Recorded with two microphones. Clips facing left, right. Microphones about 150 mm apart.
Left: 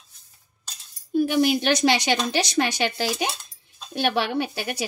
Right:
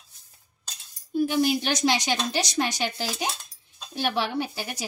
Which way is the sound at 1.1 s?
70° left (ahead or behind).